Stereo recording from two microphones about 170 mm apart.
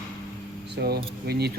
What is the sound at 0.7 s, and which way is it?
Keys jangling, 70° right (ahead or behind).